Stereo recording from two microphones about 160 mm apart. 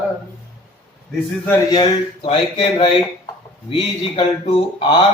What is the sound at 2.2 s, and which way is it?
Speech, 35° left (ahead or behind).